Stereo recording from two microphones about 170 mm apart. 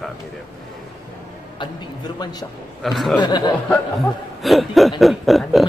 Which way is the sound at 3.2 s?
25° left (ahead or behind).